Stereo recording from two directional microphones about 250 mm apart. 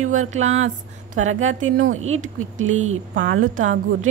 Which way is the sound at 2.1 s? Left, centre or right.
Right.